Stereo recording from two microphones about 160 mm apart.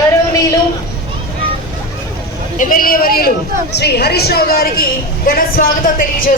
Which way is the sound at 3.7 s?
90° left.